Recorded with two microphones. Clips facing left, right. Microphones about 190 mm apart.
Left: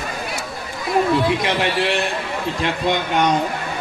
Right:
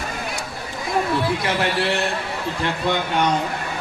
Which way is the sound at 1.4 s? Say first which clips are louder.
Left 2 dB; 20° left (ahead or behind).